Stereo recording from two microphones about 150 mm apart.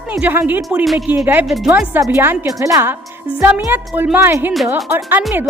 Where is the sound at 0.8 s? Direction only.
Centre (ahead or behind).